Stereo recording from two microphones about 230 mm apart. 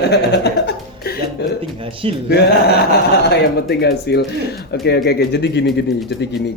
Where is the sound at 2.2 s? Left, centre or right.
Left.